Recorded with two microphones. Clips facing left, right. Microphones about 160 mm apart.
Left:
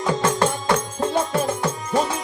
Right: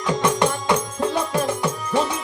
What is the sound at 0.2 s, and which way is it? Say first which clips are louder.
Music: right 1 dB; 15° right (ahead or behind).